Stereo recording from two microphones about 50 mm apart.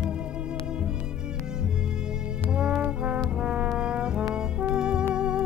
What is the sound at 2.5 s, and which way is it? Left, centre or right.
Brass instrument, centre.